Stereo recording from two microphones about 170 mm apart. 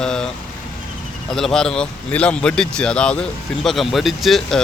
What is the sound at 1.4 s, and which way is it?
A man's voice, 5° left (ahead or behind).